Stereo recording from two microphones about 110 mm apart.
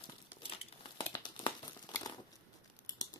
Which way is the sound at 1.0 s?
40° left (ahead or behind).